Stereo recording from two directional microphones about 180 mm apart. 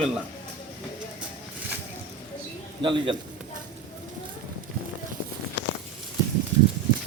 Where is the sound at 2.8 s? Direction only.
30° right (ahead or behind).